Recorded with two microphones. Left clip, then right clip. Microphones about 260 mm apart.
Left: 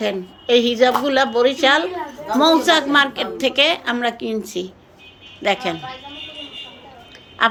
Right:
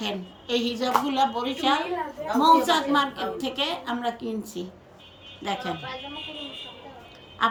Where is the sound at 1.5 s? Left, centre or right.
Left.